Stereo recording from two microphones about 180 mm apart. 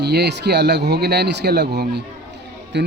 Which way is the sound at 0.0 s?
65° right (ahead or behind).